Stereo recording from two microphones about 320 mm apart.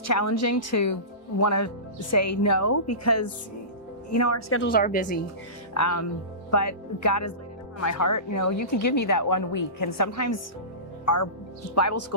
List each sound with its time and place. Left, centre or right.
0.1 s speech: left
4.4 s a woman's voice: left
4.7 s a woman's voice: left
5.7 s speech: left
11.7 s speech: left